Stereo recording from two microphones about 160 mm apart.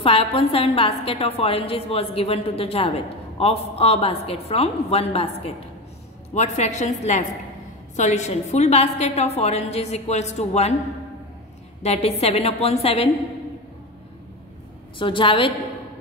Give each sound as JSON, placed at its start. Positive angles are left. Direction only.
{"t": 0.0, "sound": "a woman's voice", "side_deg": 35}
{"t": 6.3, "sound": "a woman's voice", "side_deg": 45}
{"t": 11.8, "sound": "a woman's voice", "side_deg": 40}
{"t": 15.0, "sound": "a woman's voice", "side_deg": 30}